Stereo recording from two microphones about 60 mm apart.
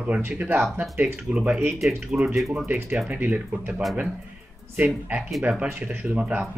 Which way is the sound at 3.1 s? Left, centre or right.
Right.